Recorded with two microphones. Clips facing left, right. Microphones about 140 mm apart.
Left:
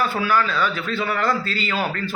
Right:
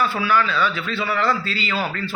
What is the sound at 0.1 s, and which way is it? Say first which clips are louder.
A man's voice: even; 45° left (ahead or behind).